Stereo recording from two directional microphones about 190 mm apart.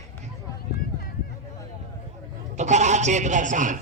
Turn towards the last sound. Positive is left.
turn(degrees=-40)  # may be behind; listen again after turning